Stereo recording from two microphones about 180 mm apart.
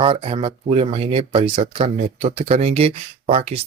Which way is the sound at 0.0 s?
30° right (ahead or behind).